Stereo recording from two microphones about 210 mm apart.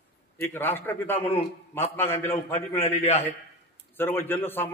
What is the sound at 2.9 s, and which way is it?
Speech, 30° left (ahead or behind).